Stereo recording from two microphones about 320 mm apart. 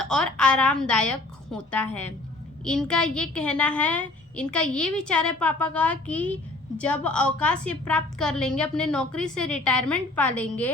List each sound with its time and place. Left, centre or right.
0.1 s a woman's voice: centre